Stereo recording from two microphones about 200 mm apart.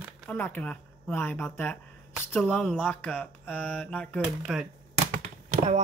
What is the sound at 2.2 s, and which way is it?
Mantra, 10° left (ahead or behind).